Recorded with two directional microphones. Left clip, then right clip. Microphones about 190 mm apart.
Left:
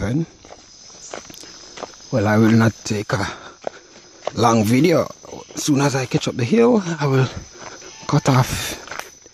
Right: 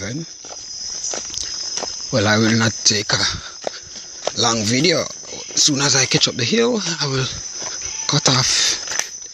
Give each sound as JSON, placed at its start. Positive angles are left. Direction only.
{"t": 2.0, "sound": "speech", "side_deg": 15}
{"t": 4.4, "sound": "speech", "side_deg": 30}